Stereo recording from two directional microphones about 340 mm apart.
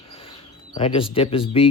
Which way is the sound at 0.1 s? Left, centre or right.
Centre.